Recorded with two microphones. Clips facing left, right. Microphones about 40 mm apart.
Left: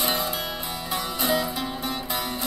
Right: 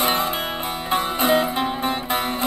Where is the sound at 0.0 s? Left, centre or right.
Right.